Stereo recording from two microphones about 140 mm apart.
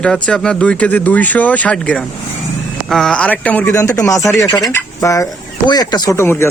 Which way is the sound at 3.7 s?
25° left (ahead or behind).